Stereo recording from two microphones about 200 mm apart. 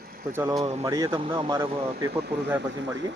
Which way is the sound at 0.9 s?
15° right (ahead or behind).